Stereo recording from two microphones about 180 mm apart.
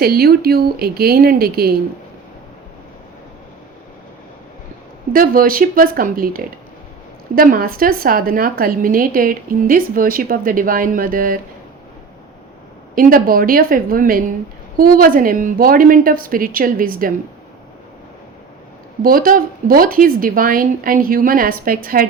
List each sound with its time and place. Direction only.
0.0 s speech: 60° right (ahead or behind)
5.1 s a woman's voice: 50° right (ahead or behind)
13.0 s a woman's voice: 50° right (ahead or behind)
19.0 s a woman's voice: 50° right (ahead or behind)